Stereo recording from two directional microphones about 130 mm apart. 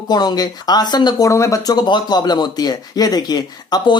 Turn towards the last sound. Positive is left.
turn(degrees=35)  # may be behind; listen again after turning